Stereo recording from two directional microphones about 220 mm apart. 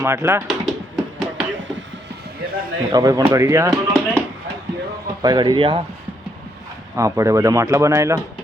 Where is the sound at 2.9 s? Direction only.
15° right (ahead or behind).